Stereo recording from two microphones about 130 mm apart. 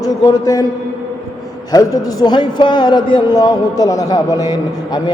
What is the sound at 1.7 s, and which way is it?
Music, 30° left (ahead or behind).